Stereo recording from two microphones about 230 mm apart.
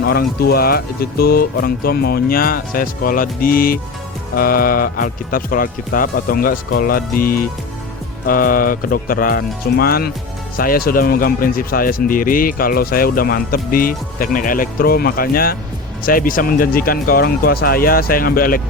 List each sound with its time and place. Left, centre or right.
0.0 s speech: left